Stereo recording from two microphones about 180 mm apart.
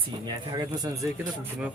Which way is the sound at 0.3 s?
20° right (ahead or behind).